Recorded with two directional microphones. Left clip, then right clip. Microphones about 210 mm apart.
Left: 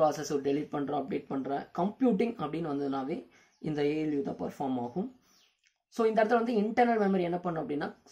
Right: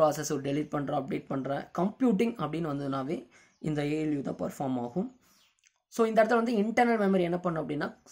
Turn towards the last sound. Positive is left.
turn(degrees=-30)  # may be behind; listen again after turning